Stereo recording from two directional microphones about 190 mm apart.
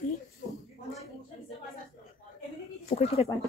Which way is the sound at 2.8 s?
35° left (ahead or behind).